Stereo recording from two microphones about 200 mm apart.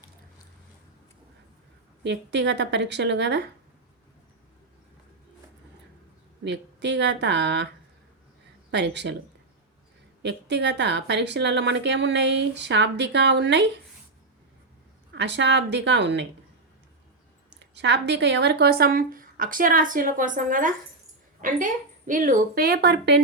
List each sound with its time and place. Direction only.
2.0 s speech: 60° right (ahead or behind)
6.4 s speech: 60° right (ahead or behind)
8.7 s speech: 60° right (ahead or behind)
10.2 s speech: 60° right (ahead or behind)
15.1 s speech: 60° right (ahead or behind)
17.5 s speech: 60° right (ahead or behind)